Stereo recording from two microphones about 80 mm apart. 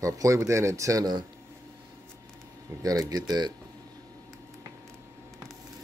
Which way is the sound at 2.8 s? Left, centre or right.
Right.